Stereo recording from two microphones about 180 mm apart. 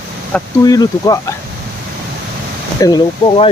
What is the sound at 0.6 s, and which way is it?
Speech, 20° left (ahead or behind).